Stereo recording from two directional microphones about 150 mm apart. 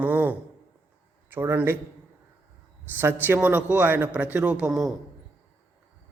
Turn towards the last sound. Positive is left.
turn(degrees=-5)  # may be behind; listen again after turning